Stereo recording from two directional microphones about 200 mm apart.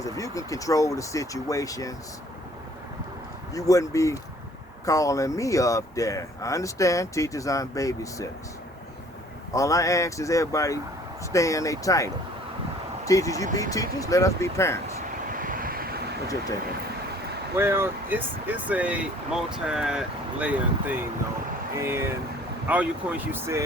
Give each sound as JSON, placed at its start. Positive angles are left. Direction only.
{"t": 0.0, "sound": "speech", "side_deg": 15}
{"t": 3.5, "sound": "speech", "side_deg": 15}
{"t": 9.5, "sound": "speech", "side_deg": 15}
{"t": 15.3, "sound": "waves", "side_deg": -45}
{"t": 17.6, "sound": "speech", "side_deg": -10}